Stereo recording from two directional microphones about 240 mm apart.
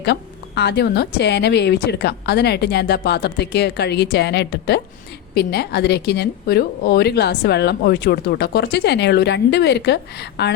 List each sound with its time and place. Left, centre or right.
0.0 s a woman's voice: left